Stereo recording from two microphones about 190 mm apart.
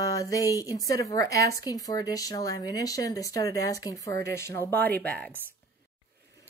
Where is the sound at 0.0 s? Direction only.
15° left (ahead or behind).